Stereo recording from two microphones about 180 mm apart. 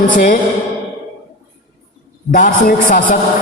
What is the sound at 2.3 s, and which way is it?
Speech, 45° left (ahead or behind).